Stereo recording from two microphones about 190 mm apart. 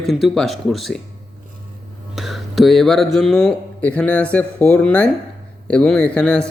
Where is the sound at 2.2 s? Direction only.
Centre (ahead or behind).